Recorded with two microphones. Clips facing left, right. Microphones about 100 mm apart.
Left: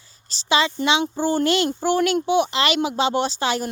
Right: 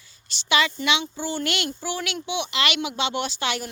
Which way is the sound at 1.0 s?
45° left (ahead or behind).